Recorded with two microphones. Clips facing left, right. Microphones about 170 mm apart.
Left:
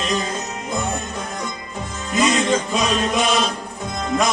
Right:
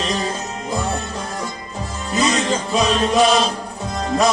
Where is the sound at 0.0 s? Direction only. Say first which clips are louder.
Even; 35° right (ahead or behind).